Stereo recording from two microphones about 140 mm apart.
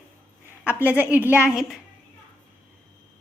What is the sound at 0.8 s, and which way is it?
Speech, 10° right (ahead or behind).